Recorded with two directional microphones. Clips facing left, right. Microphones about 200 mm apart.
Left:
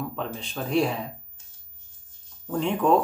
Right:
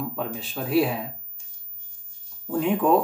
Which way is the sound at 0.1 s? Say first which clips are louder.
Right 2 dB; 5° right (ahead or behind).